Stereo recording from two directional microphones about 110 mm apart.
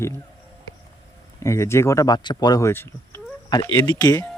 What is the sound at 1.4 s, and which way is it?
Speech, 25° left (ahead or behind).